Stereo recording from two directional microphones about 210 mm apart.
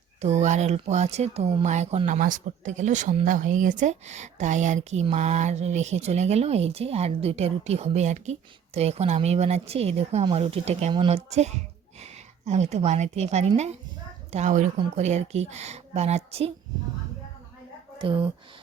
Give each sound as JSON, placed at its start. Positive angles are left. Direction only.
{"t": 0.2, "sound": "speech", "side_deg": -35}
{"t": 18.0, "sound": "speech", "side_deg": -25}